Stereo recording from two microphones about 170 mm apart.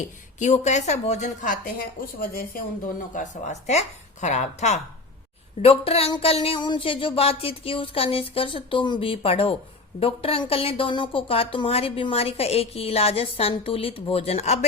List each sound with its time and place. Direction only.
0.3 s a woman's voice: 45° left (ahead or behind)
3.2 s a woman's voice: 40° left (ahead or behind)